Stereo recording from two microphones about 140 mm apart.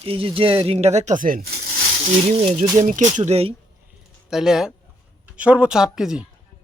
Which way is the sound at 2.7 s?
60° right (ahead or behind).